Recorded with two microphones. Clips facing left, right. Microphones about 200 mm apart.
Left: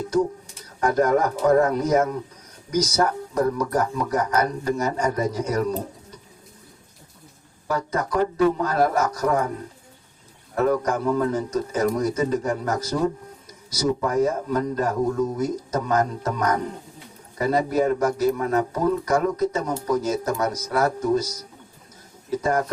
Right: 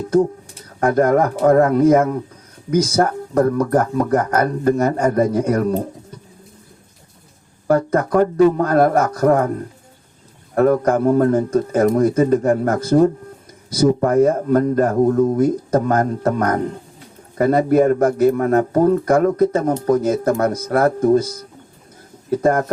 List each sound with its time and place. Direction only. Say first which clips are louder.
0.8 s speech: right 5 dB; 55° right (ahead or behind)
7.7 s speech: right 9 dB; 55° right (ahead or behind)
10.5 s speech: right 7 dB; 55° right (ahead or behind)